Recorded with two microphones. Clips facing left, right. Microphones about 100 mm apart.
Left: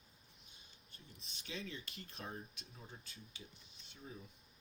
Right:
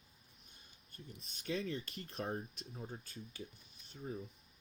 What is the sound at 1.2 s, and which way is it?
Speech, 40° right (ahead or behind).